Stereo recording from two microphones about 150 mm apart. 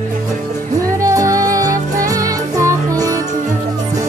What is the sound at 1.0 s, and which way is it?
Music, 20° right (ahead or behind).